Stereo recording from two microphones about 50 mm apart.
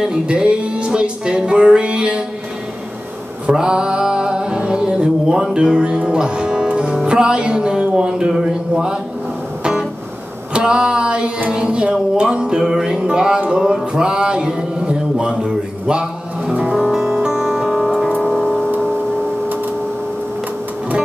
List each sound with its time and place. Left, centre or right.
0.0 s music: centre
3.4 s music: centre
13.9 s mantra: centre
16.9 s music: centre
17.7 s music: centre
18.1 s music: left